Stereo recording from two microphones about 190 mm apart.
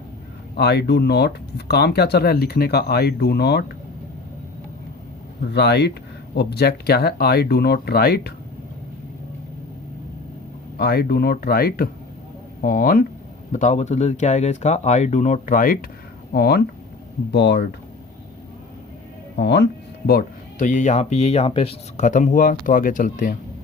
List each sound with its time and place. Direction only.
0.5 s speech: 60° left (ahead or behind)
5.5 s speech: 60° left (ahead or behind)
10.8 s speech: 55° left (ahead or behind)
19.4 s speech: 60° left (ahead or behind)
20.1 s a sound: 55° left (ahead or behind)
20.7 s speech: 40° left (ahead or behind)